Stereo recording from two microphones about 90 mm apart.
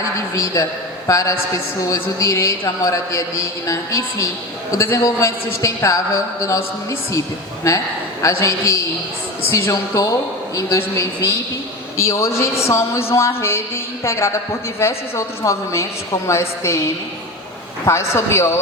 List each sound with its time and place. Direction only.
0.3 s a man's voice: 35° left (ahead or behind)
8.2 s a man's voice: 35° left (ahead or behind)
10.8 s a man's voice: 25° left (ahead or behind)
17.8 s speech: 30° left (ahead or behind)